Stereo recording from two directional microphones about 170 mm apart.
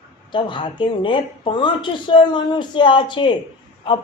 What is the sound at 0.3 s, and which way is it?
A woman's voice, 30° left (ahead or behind).